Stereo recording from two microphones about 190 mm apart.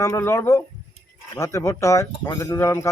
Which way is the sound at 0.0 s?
15° left (ahead or behind).